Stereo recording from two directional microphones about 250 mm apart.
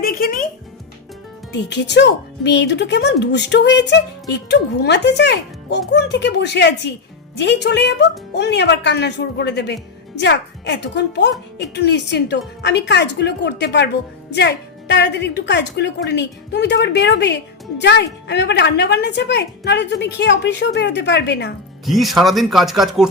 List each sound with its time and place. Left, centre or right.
0.0 s music: left
1.5 s a woman's voice: left
21.8 s speech: centre